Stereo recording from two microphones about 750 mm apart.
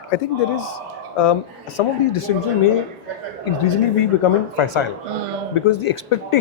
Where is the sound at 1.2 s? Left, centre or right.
Left.